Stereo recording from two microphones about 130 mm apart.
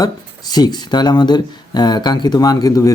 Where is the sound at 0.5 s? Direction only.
30° left (ahead or behind).